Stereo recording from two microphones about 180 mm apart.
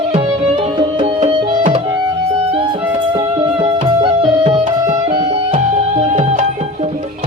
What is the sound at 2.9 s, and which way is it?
Music, 25° right (ahead or behind).